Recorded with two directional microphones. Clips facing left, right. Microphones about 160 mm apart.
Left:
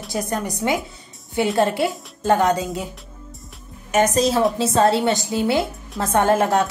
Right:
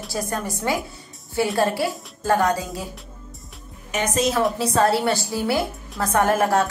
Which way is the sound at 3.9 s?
40° left (ahead or behind).